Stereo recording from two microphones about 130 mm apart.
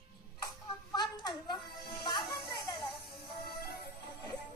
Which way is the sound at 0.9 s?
35° left (ahead or behind).